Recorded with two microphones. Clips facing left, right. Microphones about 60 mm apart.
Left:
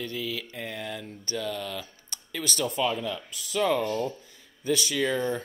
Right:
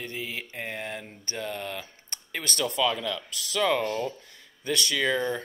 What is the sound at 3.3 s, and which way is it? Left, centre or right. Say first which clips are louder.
Speech: even; right.